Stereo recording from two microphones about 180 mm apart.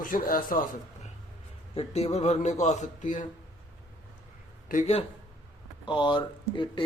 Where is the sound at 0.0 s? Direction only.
50° left (ahead or behind).